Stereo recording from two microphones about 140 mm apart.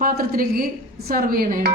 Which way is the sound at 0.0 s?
90° right.